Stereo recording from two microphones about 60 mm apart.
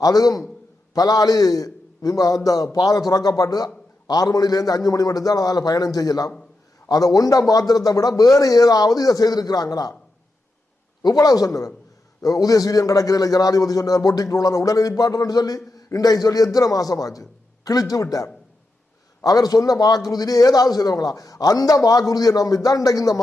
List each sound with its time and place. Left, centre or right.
0.0 s a man's voice: left
11.1 s a man's voice: left
19.2 s a man's voice: left